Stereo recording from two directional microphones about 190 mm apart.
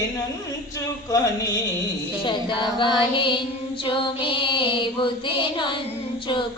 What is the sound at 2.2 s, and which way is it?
Female singing, 25° left (ahead or behind).